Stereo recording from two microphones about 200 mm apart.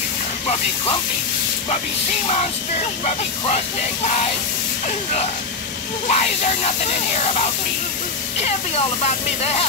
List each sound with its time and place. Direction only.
3.4 s speech: 35° left (ahead or behind)